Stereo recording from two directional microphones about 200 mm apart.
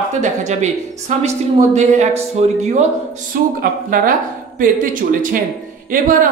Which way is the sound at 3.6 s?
45° right (ahead or behind).